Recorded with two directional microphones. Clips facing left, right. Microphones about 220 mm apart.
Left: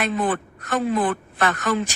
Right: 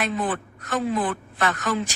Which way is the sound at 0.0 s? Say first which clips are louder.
Left 3 dB; 60° left (ahead or behind).